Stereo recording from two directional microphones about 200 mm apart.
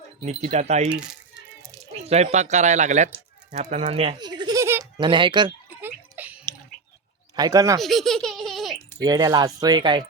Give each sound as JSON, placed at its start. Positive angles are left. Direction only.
{"t": 0.2, "sound": "speech", "side_deg": -35}
{"t": 0.9, "sound": "speech", "side_deg": -5}
{"t": 2.0, "sound": "speech", "side_deg": -35}
{"t": 5.8, "sound": "a sound", "side_deg": -10}
{"t": 7.3, "sound": "speech", "side_deg": -15}
{"t": 7.8, "sound": "a sound", "side_deg": 0}
{"t": 9.0, "sound": "speech", "side_deg": -20}